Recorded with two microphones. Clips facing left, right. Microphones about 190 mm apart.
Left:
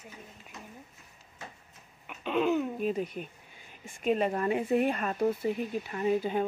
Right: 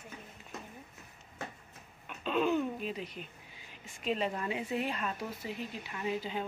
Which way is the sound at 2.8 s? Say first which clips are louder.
Left 8 dB; 50° left (ahead or behind).